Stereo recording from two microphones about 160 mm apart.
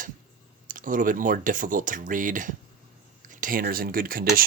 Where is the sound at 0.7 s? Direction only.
55° right (ahead or behind).